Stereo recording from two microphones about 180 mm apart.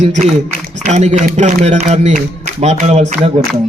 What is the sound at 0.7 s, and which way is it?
A man's voice, 40° right (ahead or behind).